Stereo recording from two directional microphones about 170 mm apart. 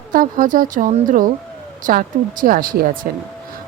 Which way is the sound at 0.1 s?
55° right (ahead or behind).